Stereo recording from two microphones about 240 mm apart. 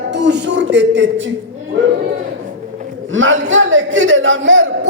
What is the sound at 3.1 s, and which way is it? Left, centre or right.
A man's voice, right.